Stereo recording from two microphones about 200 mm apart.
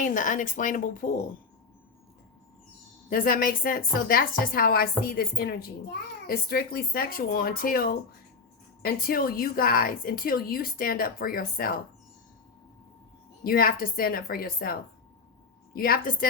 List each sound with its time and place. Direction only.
0.0 s speech: 40° left (ahead or behind)
3.1 s a woman's voice: 45° left (ahead or behind)
13.4 s a woman's voice: 45° left (ahead or behind)